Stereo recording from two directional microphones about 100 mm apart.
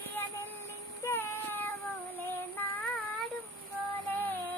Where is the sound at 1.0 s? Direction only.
25° left (ahead or behind).